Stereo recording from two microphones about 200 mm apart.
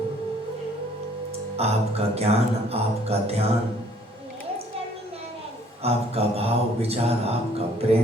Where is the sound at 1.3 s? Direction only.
30° right (ahead or behind).